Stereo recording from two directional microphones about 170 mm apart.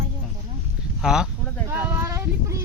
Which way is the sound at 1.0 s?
5° right (ahead or behind).